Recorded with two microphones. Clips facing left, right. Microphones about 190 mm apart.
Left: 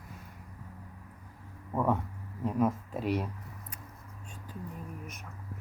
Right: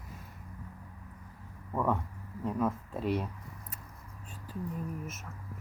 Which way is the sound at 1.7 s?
15° left (ahead or behind).